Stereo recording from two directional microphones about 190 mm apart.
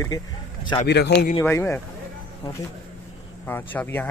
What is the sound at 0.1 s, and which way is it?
Speech, 20° left (ahead or behind).